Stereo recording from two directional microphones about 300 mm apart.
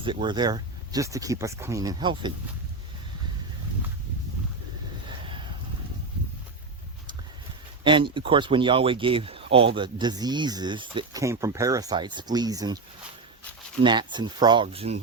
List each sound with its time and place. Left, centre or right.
0.0 s speech: centre
5.0 s a sound: centre
7.9 s speech: centre
13.8 s speech: centre